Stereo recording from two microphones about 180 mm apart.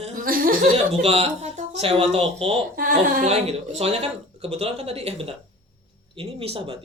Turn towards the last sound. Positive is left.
turn(degrees=-30)  # may be behind; listen again after turning